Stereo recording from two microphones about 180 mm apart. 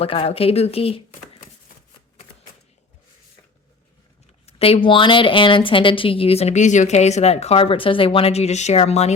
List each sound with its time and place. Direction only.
0.0 s speech: 30° left (ahead or behind)
4.4 s speech: 35° left (ahead or behind)